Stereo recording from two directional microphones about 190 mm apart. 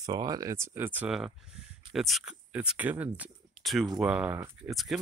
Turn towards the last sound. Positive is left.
turn(degrees=0)  # may be behind; listen again after turning